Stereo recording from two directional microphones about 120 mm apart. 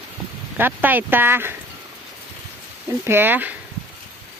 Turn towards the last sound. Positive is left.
turn(degrees=-15)  # may be behind; listen again after turning